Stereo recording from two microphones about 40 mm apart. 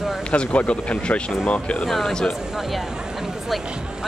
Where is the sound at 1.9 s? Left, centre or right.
Centre.